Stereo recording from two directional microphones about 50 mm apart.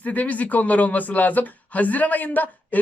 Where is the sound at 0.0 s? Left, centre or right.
Left.